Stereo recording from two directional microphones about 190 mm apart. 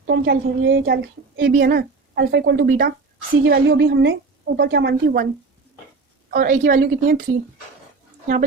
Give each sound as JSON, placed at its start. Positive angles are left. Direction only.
{"t": 0.1, "sound": "a woman's voice", "side_deg": -60}
{"t": 1.4, "sound": "a woman's voice", "side_deg": -55}
{"t": 2.6, "sound": "a woman's voice", "side_deg": -50}
{"t": 3.4, "sound": "a woman's voice", "side_deg": -70}
{"t": 6.3, "sound": "a woman's voice", "side_deg": -45}